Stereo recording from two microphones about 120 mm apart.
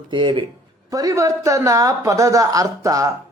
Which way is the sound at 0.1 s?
40° right (ahead or behind).